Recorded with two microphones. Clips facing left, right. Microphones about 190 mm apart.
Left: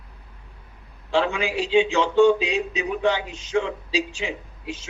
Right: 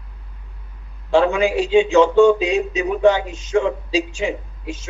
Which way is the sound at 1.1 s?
45° right (ahead or behind).